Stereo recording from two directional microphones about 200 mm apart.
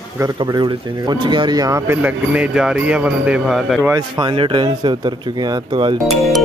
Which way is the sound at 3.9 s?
20° right (ahead or behind).